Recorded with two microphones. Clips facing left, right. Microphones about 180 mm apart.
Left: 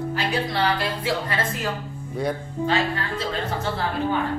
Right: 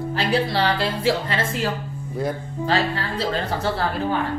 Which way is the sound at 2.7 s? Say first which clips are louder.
Right 2 dB; 35° right (ahead or behind).